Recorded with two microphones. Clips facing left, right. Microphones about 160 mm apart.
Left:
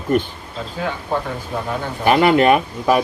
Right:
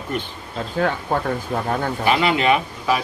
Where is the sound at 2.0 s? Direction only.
50° left (ahead or behind).